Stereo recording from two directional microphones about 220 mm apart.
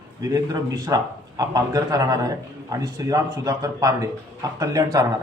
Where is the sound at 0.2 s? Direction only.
15° right (ahead or behind).